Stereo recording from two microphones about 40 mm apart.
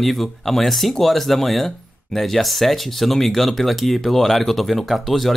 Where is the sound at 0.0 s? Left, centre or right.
Centre.